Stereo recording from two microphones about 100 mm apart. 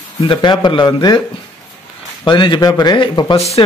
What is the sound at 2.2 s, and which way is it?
A man's voice, 50° left (ahead or behind).